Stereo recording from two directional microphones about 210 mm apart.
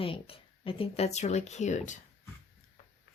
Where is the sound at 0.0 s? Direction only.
25° left (ahead or behind).